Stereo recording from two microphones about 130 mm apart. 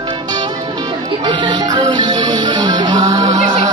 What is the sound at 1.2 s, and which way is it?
Music, 35° right (ahead or behind).